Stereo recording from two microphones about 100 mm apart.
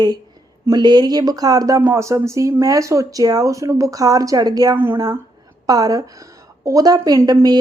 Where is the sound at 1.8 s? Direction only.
25° right (ahead or behind).